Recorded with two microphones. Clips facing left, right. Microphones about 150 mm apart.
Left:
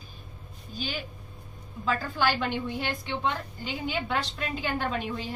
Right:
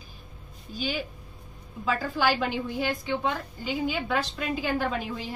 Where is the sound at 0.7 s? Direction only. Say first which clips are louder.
Right 4 dB; 10° right (ahead or behind).